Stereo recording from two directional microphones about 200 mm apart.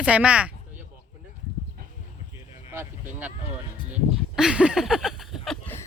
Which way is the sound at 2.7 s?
10° right (ahead or behind).